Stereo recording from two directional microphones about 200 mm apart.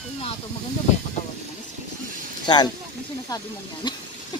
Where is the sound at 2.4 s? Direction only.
20° left (ahead or behind).